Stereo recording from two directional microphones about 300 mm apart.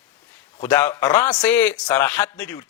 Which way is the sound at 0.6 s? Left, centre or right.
Centre.